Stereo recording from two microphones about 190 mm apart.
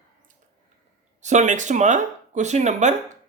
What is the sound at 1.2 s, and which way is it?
Speech, 40° right (ahead or behind).